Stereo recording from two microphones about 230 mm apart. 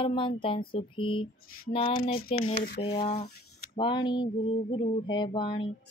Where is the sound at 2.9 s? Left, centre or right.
Left.